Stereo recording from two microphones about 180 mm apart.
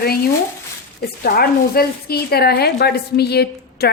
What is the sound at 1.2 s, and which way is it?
Speech, 55° left (ahead or behind).